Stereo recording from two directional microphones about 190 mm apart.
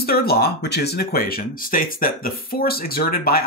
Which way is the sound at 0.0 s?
55° left (ahead or behind).